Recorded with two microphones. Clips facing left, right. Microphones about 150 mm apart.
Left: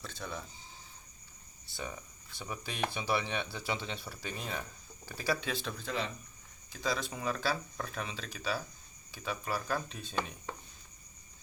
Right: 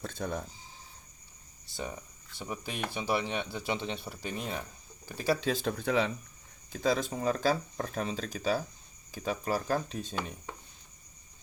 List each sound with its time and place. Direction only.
0.0 s speech: 50° right (ahead or behind)
1.7 s speech: 20° right (ahead or behind)
5.1 s speech: 30° right (ahead or behind); by 6.1 s 60° right (ahead or behind)
6.7 s speech: 45° right (ahead or behind)